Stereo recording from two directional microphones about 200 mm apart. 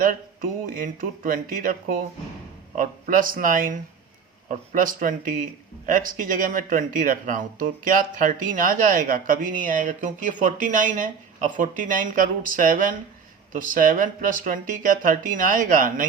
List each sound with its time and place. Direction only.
0.7 s speech: 45° right (ahead or behind)
2.7 s a man's voice: 45° right (ahead or behind)